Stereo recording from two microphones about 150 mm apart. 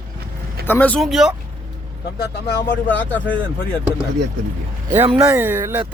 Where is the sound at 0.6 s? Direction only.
10° left (ahead or behind).